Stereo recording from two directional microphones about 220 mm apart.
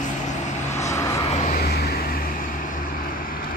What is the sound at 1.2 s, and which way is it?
Vehicle, 30° left (ahead or behind).